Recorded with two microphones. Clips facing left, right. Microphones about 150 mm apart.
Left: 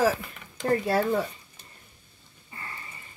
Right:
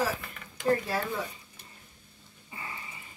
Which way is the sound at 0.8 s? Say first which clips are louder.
Left 8 dB; 65° left (ahead or behind).